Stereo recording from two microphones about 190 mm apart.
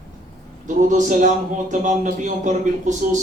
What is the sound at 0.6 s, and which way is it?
A man's voice, 40° right (ahead or behind).